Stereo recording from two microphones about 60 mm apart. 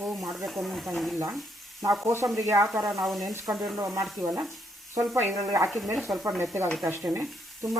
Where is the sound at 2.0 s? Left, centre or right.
Right.